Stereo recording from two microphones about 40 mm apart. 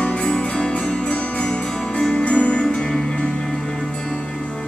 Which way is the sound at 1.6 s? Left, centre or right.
Centre.